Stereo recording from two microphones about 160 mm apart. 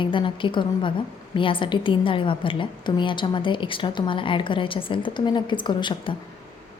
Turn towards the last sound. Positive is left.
turn(degrees=30)  # may be behind; listen again after turning